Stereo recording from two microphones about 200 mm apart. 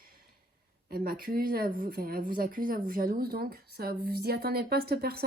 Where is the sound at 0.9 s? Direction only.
45° right (ahead or behind).